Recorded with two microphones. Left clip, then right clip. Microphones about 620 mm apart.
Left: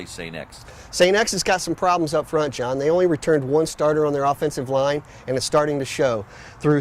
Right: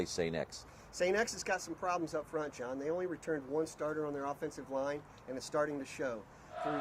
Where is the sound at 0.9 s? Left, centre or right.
Left.